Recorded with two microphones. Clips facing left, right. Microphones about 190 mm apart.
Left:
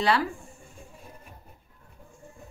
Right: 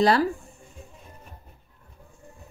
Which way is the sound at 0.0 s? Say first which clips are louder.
Right 5 dB; 40° right (ahead or behind).